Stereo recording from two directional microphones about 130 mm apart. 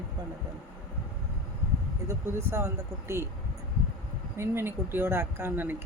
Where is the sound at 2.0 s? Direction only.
20° right (ahead or behind).